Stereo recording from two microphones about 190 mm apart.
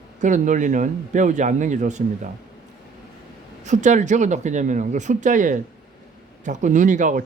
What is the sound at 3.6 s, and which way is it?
Speech, 40° right (ahead or behind).